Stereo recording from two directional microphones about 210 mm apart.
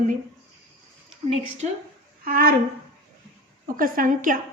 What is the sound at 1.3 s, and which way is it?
Speech, 30° right (ahead or behind).